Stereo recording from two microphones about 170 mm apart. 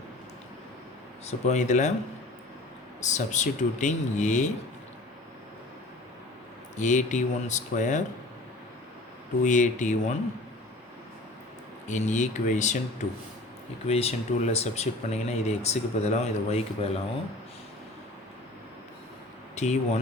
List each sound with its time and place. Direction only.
1.3 s speech: 45° left (ahead or behind)
3.0 s speech: 45° left (ahead or behind)
6.7 s speech: 45° left (ahead or behind)
9.4 s speech: 45° left (ahead or behind)
11.9 s speech: 45° left (ahead or behind)
13.8 s speech: 40° left (ahead or behind)
19.5 s speech: 40° left (ahead or behind)